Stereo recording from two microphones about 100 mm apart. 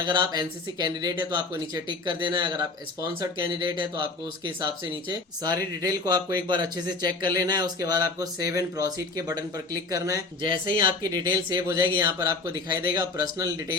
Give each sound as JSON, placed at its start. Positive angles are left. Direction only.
{"t": 0.0, "sound": "speech", "side_deg": -45}
{"t": 5.0, "sound": "speech", "side_deg": -40}
{"t": 10.4, "sound": "speech", "side_deg": -55}